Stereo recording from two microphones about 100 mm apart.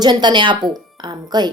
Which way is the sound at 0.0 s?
50° right (ahead or behind).